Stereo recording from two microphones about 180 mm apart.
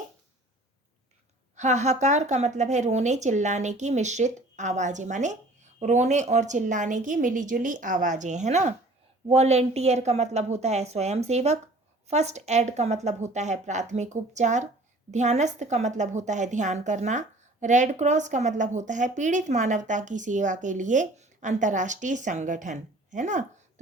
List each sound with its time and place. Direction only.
1.5 s a woman's voice: 40° right (ahead or behind)